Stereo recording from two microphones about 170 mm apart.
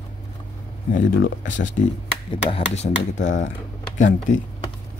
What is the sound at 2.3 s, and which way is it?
Speech, 35° left (ahead or behind).